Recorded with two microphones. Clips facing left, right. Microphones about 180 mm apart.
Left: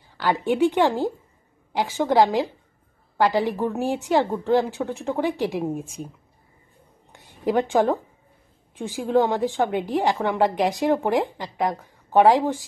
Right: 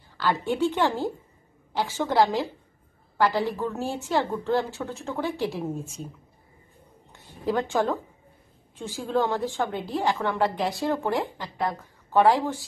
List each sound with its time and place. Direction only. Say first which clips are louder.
0.2 s a woman's voice: left 4 dB; 15° left (ahead or behind)
7.1 s a sound: left 3 dB; 15° left (ahead or behind)
8.7 s a woman's voice: left 5 dB; 15° left (ahead or behind)